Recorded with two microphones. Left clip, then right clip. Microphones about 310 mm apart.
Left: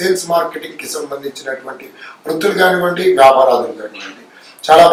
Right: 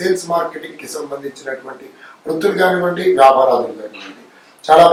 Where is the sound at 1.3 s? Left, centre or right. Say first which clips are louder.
Left 3 dB; centre.